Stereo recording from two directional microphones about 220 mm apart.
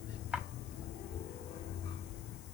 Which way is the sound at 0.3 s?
5° right (ahead or behind).